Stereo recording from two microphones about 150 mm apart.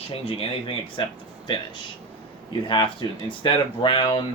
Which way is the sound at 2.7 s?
35° left (ahead or behind).